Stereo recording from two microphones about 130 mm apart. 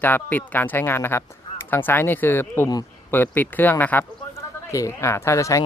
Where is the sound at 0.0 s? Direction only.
15° left (ahead or behind).